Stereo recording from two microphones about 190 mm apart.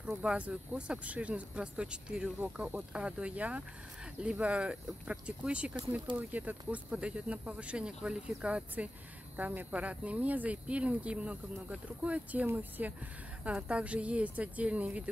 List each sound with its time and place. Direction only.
0.0 s speech: 5° right (ahead or behind)
6.1 s speech: 25° right (ahead or behind)
6.7 s speech: 5° right (ahead or behind)